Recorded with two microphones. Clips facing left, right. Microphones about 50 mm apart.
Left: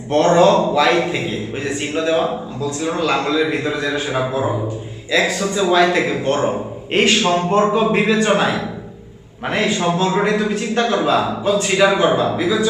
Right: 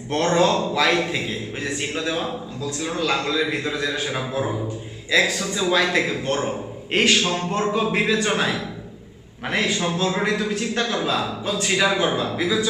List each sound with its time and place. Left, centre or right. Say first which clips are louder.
0.3 s a man's voice: left 6 dB; centre
7.2 s a man's voice: left 7 dB; left
9.7 s a man's voice: left 6 dB; left
10.0 s a man's voice: left 5 dB; centre
11.9 s a man's voice: left 6 dB; left